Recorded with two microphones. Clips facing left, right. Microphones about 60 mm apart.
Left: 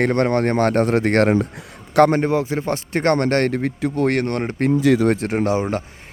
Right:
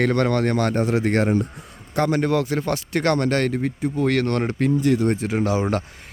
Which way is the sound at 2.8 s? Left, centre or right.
Left.